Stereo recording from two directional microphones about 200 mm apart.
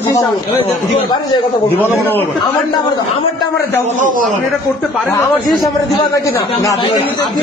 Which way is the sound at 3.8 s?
40° right (ahead or behind).